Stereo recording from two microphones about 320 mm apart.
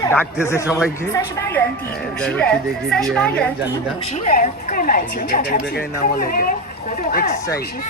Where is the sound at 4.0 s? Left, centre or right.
Left.